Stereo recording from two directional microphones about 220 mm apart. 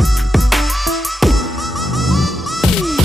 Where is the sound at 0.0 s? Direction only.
Centre (ahead or behind).